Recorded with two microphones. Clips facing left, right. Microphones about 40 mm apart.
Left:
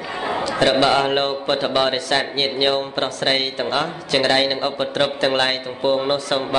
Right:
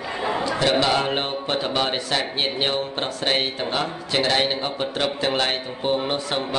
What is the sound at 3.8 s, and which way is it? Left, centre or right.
A man's voice, left.